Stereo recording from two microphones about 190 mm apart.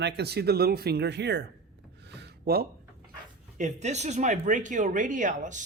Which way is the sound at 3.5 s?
40° right (ahead or behind).